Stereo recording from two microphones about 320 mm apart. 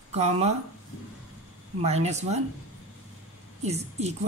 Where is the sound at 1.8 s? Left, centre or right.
Centre.